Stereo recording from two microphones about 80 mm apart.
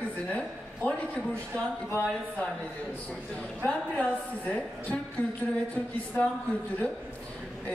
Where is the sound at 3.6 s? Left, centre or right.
Centre.